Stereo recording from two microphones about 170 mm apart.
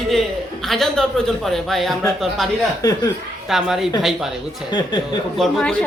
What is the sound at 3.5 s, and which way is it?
Speech, centre (ahead or behind).